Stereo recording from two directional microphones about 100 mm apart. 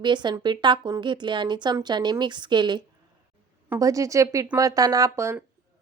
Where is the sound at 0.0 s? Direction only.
50° right (ahead or behind).